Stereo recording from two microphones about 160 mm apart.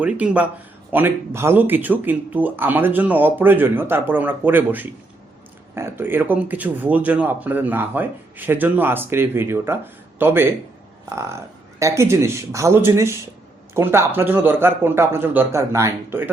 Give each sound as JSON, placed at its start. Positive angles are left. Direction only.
{"t": 0.0, "sound": "speech", "side_deg": -10}